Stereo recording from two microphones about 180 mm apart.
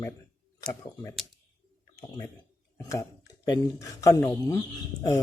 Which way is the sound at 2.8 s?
15° left (ahead or behind).